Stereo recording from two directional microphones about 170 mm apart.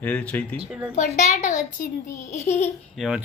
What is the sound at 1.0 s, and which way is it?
A woman's voice, 45° left (ahead or behind).